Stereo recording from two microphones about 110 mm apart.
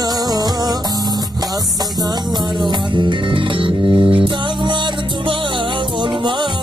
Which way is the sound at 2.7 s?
45° right (ahead or behind).